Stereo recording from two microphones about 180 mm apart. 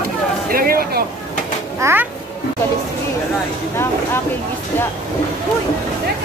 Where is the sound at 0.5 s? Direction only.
55° right (ahead or behind).